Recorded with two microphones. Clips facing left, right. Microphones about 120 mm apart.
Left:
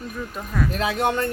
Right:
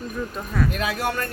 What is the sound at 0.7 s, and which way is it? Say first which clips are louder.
Speech: left 3 dB; 25° left (ahead or behind).